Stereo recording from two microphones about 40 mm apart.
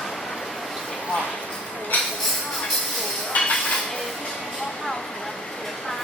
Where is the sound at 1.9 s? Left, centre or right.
Left.